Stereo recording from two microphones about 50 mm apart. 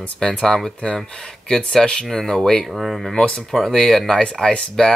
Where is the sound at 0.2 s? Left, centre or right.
Centre.